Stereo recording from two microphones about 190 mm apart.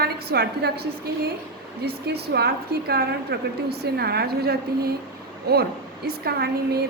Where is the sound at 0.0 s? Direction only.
55° right (ahead or behind).